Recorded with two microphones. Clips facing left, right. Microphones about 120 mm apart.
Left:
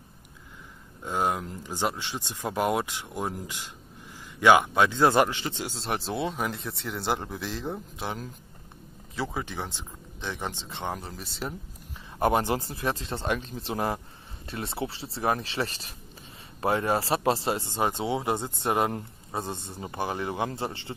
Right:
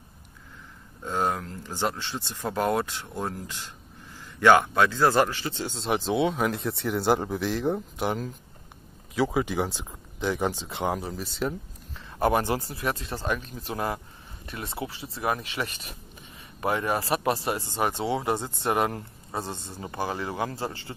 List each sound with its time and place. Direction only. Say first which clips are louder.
1.0 s speech: even; 10° left (ahead or behind)
5.7 s speech: right 8 dB; centre (ahead or behind)
9.4 s speech: right 7 dB; 10° right (ahead or behind)
12.2 s speech: even; 20° left (ahead or behind)